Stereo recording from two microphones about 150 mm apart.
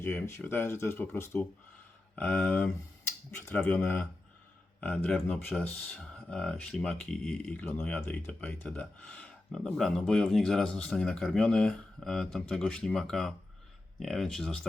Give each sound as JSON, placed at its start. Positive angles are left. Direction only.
{"t": 0.0, "sound": "speech", "side_deg": 15}
{"t": 5.0, "sound": "speech", "side_deg": 5}